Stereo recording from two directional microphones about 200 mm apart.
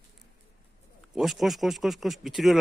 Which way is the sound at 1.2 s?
Centre (ahead or behind).